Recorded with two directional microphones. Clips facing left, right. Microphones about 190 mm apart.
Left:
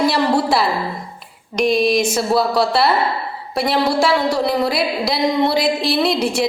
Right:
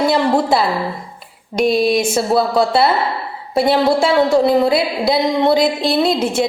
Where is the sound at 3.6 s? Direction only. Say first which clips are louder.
Right 4 dB; 25° right (ahead or behind).